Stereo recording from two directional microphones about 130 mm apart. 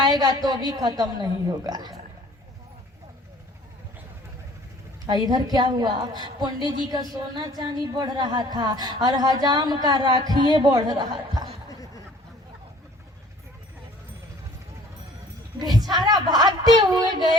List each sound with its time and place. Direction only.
0.0 s a woman's voice: 30° right (ahead or behind)
5.0 s a woman's voice: 30° right (ahead or behind)
11.7 s a sound: 30° left (ahead or behind)
15.5 s a woman's voice: 30° right (ahead or behind)